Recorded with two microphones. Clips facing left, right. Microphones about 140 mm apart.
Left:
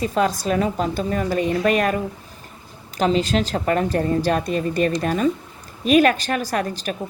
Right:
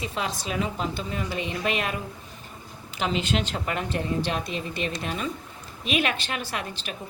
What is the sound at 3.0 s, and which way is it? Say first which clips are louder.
A woman's voice: left 7 dB; 35° left (ahead or behind).